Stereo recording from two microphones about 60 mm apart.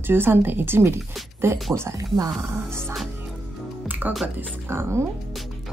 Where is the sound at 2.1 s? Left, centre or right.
Right.